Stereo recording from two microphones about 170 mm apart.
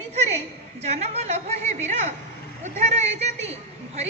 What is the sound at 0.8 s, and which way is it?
A man's voice, 40° right (ahead or behind).